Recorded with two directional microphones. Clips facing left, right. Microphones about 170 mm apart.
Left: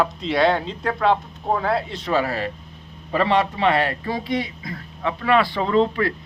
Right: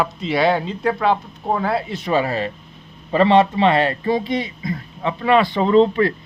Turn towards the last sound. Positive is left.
turn(degrees=-20)  # may be behind; listen again after turning